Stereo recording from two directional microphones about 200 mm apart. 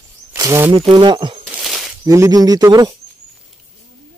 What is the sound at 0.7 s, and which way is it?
Speech, 25° right (ahead or behind).